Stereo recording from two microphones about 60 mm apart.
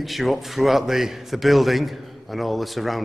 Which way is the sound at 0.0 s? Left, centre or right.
Centre.